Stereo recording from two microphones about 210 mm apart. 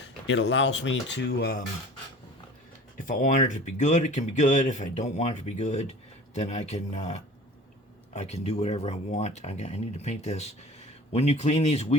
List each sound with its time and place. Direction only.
0.3 s speech: 60° left (ahead or behind)
3.1 s speech: 35° left (ahead or behind)